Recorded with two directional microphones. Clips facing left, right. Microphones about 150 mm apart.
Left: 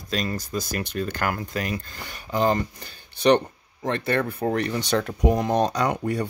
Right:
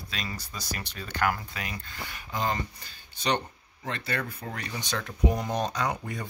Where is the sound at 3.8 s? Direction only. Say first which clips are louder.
Left 9 dB; 50° left (ahead or behind).